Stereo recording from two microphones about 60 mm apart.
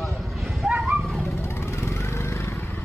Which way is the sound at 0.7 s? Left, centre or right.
Centre.